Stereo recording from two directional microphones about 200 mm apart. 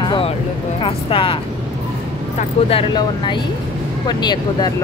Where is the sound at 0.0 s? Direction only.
25° left (ahead or behind).